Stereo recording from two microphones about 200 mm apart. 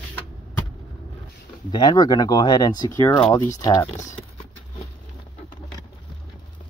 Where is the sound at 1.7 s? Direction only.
20° left (ahead or behind).